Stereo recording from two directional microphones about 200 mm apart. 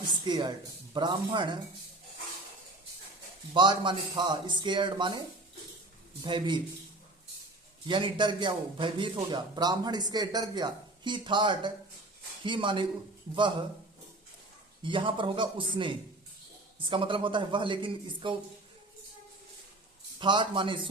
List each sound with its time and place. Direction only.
0.1 s a sound: 20° right (ahead or behind)
0.9 s a man's voice: 25° right (ahead or behind)
3.5 s a man's voice: 25° right (ahead or behind)
6.2 s a man's voice: 25° right (ahead or behind)
7.9 s a man's voice: 25° right (ahead or behind)
14.8 s a man's voice: 25° right (ahead or behind)
20.1 s a man's voice: 25° right (ahead or behind)